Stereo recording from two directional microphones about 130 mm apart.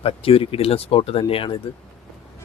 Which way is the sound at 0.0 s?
45° left (ahead or behind).